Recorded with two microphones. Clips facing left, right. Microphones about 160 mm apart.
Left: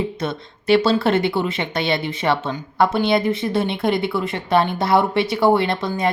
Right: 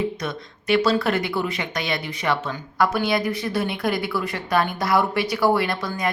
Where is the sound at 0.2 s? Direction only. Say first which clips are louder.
Left 4 dB; 25° left (ahead or behind).